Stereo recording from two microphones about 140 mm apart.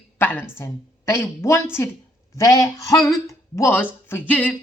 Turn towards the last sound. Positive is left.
turn(degrees=10)  # may be behind; listen again after turning